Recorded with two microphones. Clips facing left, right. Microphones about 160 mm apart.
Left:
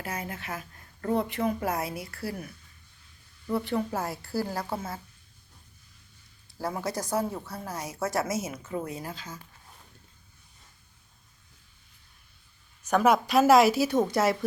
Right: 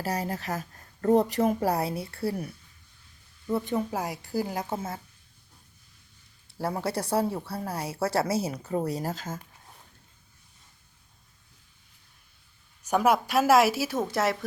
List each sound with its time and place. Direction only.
0.0 s speech: 35° right (ahead or behind)
3.7 s a woman's voice: 15° right (ahead or behind)
6.6 s speech: 30° right (ahead or behind); by 9.4 s 45° right (ahead or behind)
12.8 s a woman's voice: 10° right (ahead or behind)